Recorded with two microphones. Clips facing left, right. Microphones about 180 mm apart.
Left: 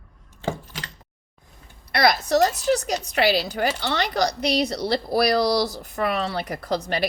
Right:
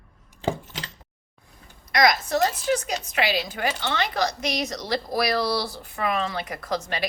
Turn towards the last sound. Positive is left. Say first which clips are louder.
# left 3 dB
turn(degrees=35)  # may be behind; listen again after turning